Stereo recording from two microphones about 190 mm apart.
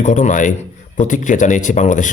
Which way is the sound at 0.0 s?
40° left (ahead or behind).